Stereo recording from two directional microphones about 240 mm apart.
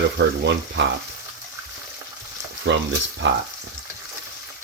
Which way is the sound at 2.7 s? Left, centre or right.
Right.